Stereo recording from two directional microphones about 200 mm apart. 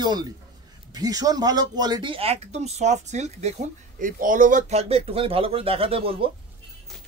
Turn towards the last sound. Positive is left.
turn(degrees=-30)  # may be behind; listen again after turning